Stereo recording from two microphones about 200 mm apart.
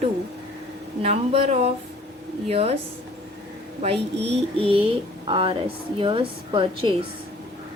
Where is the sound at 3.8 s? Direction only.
30° right (ahead or behind).